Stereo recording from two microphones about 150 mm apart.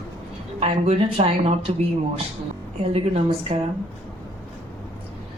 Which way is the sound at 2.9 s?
40° right (ahead or behind).